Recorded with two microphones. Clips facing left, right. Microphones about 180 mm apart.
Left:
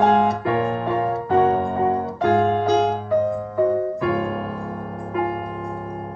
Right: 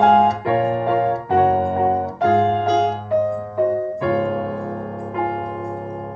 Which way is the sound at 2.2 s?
25° right (ahead or behind).